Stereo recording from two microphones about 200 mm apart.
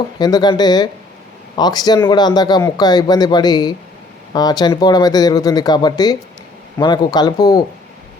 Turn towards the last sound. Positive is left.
turn(degrees=20)  # may be behind; listen again after turning